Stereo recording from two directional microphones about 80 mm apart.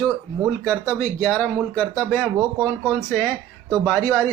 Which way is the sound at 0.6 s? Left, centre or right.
Centre.